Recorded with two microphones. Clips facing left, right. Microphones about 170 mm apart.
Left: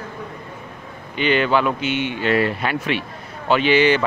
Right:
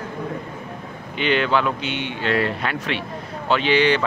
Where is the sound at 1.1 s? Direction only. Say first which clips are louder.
Left 2 dB; 5° left (ahead or behind).